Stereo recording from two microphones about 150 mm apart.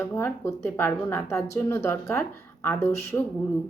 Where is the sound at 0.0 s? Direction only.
15° left (ahead or behind).